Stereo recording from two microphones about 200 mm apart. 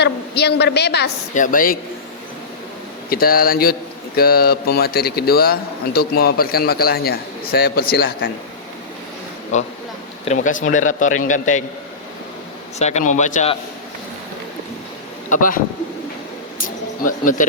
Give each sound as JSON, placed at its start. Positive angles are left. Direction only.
{"t": 0.0, "sound": "a woman's voice", "side_deg": 55}
{"t": 1.3, "sound": "a man's voice", "side_deg": 40}
{"t": 3.1, "sound": "a man's voice", "side_deg": 50}
{"t": 9.5, "sound": "a man's voice", "side_deg": 35}
{"t": 12.8, "sound": "a man's voice", "side_deg": 35}
{"t": 15.3, "sound": "a man's voice", "side_deg": 45}
{"t": 16.6, "sound": "a sound", "side_deg": 45}